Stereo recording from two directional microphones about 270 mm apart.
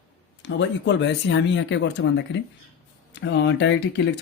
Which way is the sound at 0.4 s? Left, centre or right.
Left.